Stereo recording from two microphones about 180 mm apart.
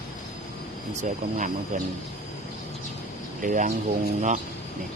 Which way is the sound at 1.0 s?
45° right (ahead or behind).